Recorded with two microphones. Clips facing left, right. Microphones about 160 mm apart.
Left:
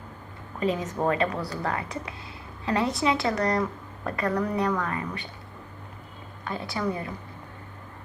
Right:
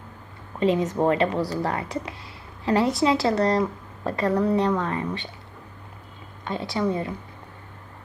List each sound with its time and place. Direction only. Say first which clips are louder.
0.6 s a woman's voice: right 5 dB; 30° right (ahead or behind)
6.4 s a woman's voice: right 4 dB; 30° right (ahead or behind)